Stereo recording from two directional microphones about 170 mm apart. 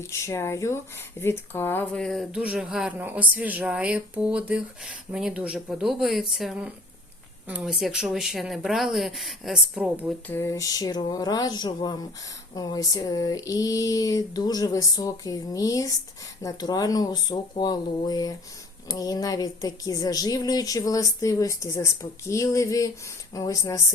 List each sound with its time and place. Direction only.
0.0 s speech: 15° left (ahead or behind); by 10.1 s 5° right (ahead or behind)
10.2 s speech: 15° left (ahead or behind)